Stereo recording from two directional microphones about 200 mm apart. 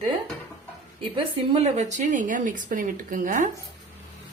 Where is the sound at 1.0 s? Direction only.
25° right (ahead or behind).